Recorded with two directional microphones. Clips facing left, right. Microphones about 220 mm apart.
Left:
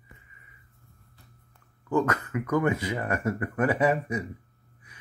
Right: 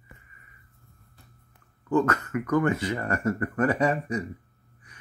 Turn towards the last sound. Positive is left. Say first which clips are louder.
# even
turn(degrees=5)  # may be behind; listen again after turning